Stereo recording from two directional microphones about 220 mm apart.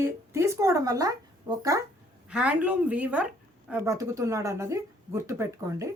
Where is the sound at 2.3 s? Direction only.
5° right (ahead or behind).